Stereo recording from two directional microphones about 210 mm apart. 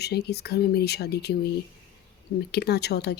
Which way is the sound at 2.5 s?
50° left (ahead or behind).